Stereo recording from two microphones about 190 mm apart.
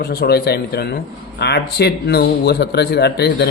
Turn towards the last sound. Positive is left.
turn(degrees=60)  # may be behind; listen again after turning